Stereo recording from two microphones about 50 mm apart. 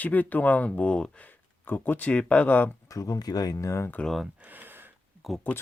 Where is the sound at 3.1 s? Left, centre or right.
Left.